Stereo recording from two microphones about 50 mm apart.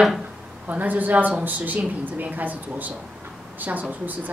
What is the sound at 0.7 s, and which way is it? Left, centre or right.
A woman's voice, right.